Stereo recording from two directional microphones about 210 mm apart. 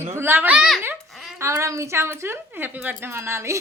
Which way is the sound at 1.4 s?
15° right (ahead or behind).